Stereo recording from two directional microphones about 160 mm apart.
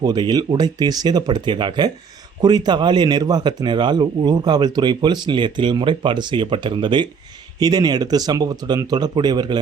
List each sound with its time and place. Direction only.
0.0 s speech: 25° right (ahead or behind)